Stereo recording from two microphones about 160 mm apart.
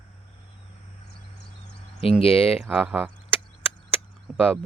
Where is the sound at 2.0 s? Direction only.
35° left (ahead or behind).